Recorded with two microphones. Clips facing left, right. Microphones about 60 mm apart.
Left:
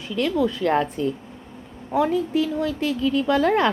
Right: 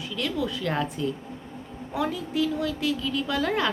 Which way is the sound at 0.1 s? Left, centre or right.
Left.